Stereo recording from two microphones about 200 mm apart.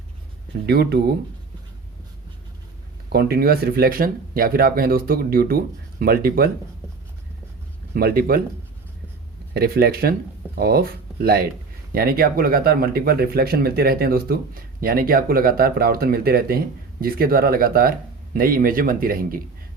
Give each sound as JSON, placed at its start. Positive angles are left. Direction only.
{"t": 0.6, "sound": "speech", "side_deg": -55}
{"t": 3.1, "sound": "speech", "side_deg": -50}
{"t": 7.9, "sound": "speech", "side_deg": -50}
{"t": 9.6, "sound": "speech", "side_deg": -50}